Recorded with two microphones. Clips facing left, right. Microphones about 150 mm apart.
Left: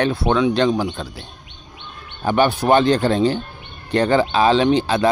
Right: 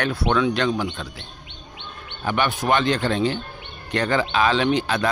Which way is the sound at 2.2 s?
35° left (ahead or behind).